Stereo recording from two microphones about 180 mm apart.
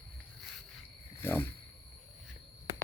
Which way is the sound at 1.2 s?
15° left (ahead or behind).